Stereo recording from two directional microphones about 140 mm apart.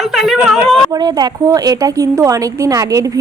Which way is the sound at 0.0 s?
Centre (ahead or behind).